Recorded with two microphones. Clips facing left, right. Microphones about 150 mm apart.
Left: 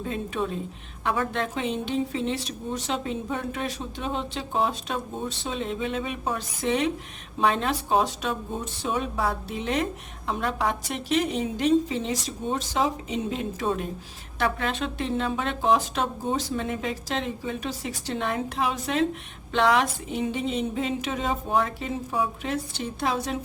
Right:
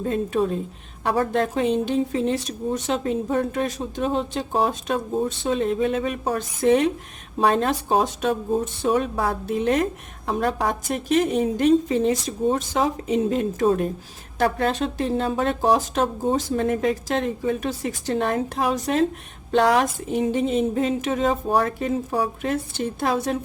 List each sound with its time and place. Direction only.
0.0 s a woman's voice: 40° right (ahead or behind)